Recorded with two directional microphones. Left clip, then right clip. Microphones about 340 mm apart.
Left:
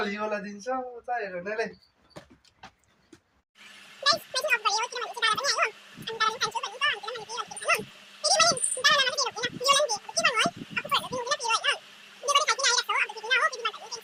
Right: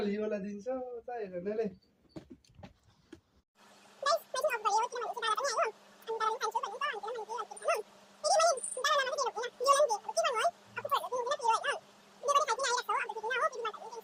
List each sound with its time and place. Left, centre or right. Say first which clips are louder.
0.6 s speech: left 6 dB; right
4.0 s speech: left 5 dB; right
8.2 s a sound: left 4 dB; right